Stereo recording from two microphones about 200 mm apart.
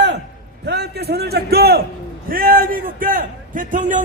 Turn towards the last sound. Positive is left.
turn(degrees=-40)  # may be behind; listen again after turning